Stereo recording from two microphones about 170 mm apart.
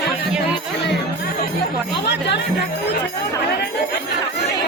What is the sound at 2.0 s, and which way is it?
Speech, 90° left.